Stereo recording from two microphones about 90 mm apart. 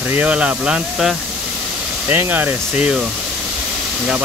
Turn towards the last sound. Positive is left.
turn(degrees=-10)  # may be behind; listen again after turning